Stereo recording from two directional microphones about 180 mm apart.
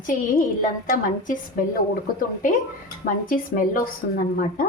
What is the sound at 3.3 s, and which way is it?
Speech, 50° left (ahead or behind).